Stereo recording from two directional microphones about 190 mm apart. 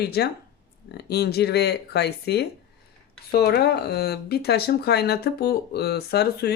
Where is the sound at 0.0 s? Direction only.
55° left (ahead or behind).